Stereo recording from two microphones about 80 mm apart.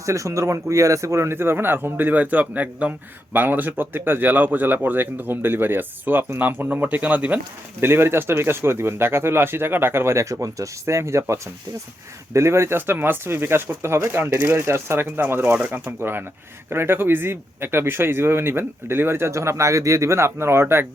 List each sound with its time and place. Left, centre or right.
0.0 s speech: right